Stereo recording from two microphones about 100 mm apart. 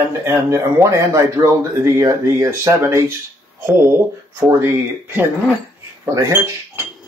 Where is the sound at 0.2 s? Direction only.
25° right (ahead or behind).